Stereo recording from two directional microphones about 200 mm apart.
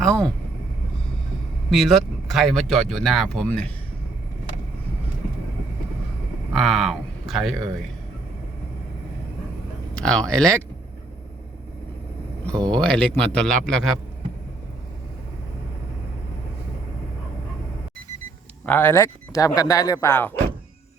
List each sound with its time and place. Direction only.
0.0 s vehicle: 5° left (ahead or behind)
1.7 s speech: centre (ahead or behind)
6.5 s speech: centre (ahead or behind)
9.9 s speech: 5° left (ahead or behind)
12.7 s speech: 5° left (ahead or behind)
18.6 s a man's voice: 10° left (ahead or behind)